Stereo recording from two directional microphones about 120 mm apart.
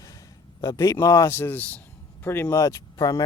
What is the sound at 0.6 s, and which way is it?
Speech, 25° left (ahead or behind).